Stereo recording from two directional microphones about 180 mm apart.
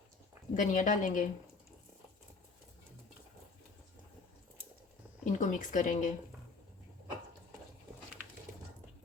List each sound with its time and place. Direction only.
0.5 s speech: 45° left (ahead or behind)
5.2 s speech: 45° left (ahead or behind)